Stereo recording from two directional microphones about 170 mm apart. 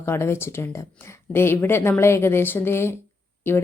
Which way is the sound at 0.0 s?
15° left (ahead or behind).